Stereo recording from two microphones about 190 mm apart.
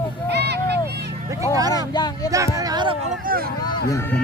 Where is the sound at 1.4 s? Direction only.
20° right (ahead or behind).